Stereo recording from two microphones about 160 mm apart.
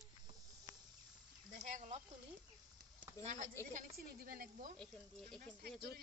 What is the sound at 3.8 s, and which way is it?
Speech, 65° right (ahead or behind).